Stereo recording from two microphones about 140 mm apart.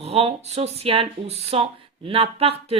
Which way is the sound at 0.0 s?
45° right (ahead or behind).